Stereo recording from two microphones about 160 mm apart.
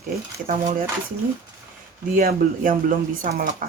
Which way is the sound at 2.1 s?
60° right (ahead or behind).